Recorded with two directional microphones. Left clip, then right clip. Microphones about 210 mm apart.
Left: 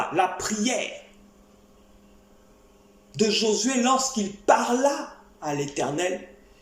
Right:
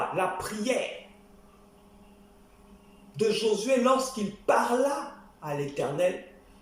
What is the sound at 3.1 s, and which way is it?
Speech, 40° left (ahead or behind).